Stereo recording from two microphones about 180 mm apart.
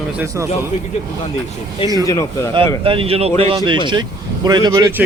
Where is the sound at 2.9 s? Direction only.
30° right (ahead or behind).